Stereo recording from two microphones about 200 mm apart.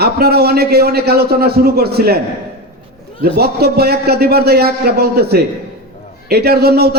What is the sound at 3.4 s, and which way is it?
A man's voice, 50° right (ahead or behind).